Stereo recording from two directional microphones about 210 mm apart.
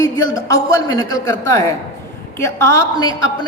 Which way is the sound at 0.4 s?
15° left (ahead or behind).